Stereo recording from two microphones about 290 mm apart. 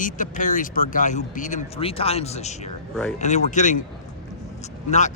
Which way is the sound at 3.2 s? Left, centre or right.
Left.